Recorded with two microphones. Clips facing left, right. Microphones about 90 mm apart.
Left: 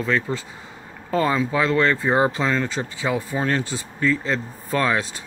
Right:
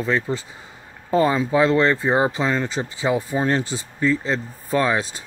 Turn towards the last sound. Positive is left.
turn(degrees=-20)  # may be behind; listen again after turning